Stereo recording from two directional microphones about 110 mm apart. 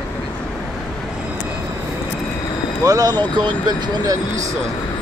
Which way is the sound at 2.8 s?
35° right (ahead or behind).